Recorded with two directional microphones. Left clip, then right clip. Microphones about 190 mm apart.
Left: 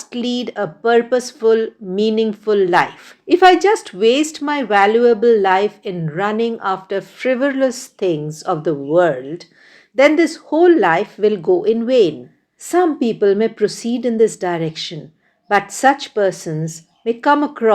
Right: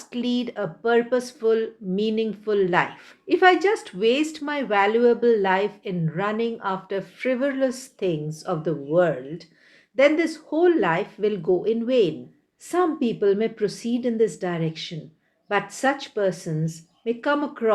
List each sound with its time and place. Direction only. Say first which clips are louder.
0.0 s speech: left 5 dB; 35° left (ahead or behind)